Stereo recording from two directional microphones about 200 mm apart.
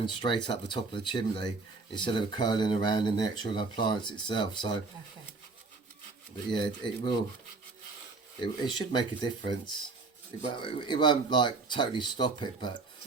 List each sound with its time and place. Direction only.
0.0 s speech: 25° left (ahead or behind)
6.5 s speech: 25° left (ahead or behind)
8.4 s speech: 25° left (ahead or behind)
10.5 s speech: 25° left (ahead or behind)